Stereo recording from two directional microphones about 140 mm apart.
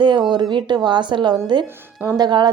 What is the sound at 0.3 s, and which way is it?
A woman's voice, 30° right (ahead or behind).